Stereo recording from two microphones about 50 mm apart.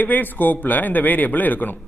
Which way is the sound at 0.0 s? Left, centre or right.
Left.